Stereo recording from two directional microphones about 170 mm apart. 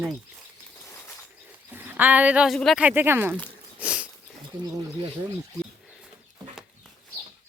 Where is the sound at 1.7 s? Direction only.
10° right (ahead or behind).